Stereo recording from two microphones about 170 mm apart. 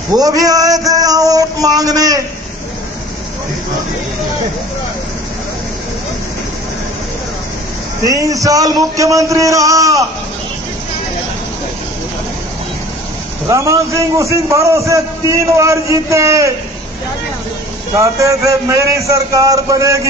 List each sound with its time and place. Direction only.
0.1 s a sound: 20° right (ahead or behind)
8.0 s a man's voice: 20° right (ahead or behind)
13.5 s a man's voice: 20° right (ahead or behind)
17.9 s a man's voice: 20° right (ahead or behind)